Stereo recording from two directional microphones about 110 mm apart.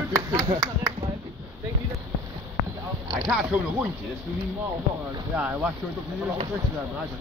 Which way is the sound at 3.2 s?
5° right (ahead or behind).